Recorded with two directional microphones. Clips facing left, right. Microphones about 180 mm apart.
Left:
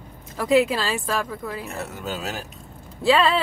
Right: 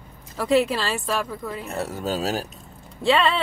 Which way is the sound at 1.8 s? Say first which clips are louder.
Right 5 dB; 35° right (ahead or behind).